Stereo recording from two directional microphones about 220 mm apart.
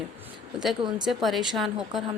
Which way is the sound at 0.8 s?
20° right (ahead or behind).